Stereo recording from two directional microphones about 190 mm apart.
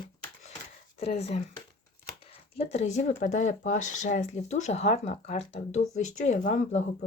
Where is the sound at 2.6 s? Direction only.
35° left (ahead or behind).